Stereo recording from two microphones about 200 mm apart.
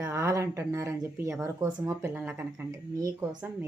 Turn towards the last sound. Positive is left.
turn(degrees=-15)  # may be behind; listen again after turning